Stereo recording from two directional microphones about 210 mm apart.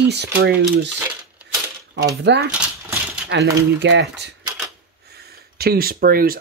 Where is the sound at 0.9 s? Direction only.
10° right (ahead or behind).